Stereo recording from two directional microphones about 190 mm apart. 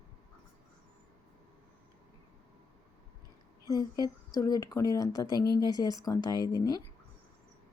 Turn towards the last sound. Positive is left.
turn(degrees=20)  # may be behind; listen again after turning